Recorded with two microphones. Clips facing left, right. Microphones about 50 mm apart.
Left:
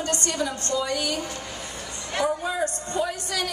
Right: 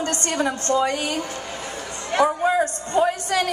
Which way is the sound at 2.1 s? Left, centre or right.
Right.